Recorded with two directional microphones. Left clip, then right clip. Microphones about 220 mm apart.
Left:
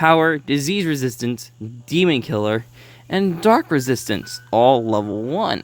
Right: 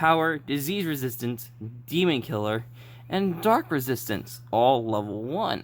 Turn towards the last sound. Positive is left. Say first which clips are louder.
# left 7 dB
turn(degrees=30)  # may be behind; listen again after turning